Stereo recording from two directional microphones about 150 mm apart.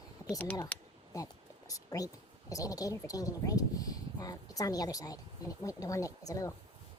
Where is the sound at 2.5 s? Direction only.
25° left (ahead or behind).